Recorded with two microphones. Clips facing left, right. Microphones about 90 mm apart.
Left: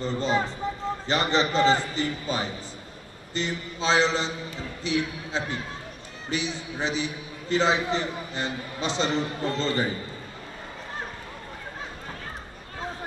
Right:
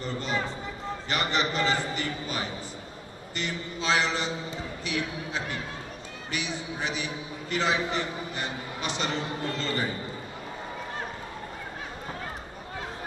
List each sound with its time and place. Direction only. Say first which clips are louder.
0.0 s a man's voice: left 5 dB; 25° left (ahead or behind)